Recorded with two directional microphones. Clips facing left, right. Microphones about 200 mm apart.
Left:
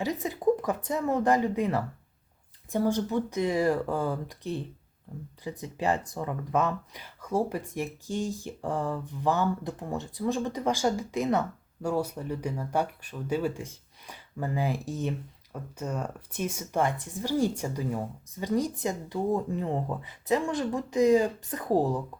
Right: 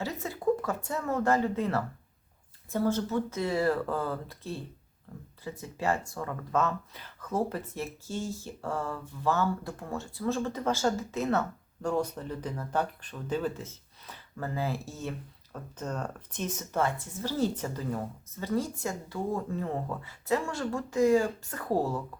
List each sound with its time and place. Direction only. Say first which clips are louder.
0.0 s speech: left 4 dB; 15° left (ahead or behind)